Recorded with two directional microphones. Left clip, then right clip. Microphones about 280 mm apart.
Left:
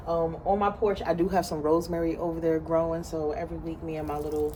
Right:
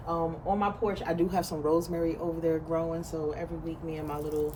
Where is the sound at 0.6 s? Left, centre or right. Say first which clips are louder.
Left 4 dB; centre.